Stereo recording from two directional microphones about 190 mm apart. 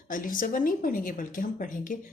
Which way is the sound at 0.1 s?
45° left (ahead or behind).